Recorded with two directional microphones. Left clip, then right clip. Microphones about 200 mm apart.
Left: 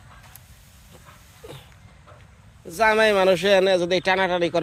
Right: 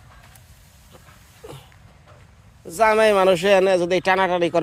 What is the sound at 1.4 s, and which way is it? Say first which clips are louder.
Vehicle: right 2 dB; 25° right (ahead or behind).